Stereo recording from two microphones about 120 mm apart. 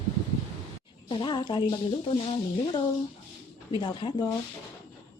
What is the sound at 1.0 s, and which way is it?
A woman's voice, 40° left (ahead or behind).